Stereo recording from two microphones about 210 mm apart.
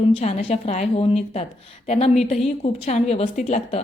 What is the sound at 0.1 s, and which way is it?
A woman's voice, 30° left (ahead or behind).